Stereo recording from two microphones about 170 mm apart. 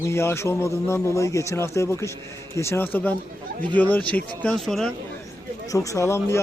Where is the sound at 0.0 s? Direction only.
15° left (ahead or behind).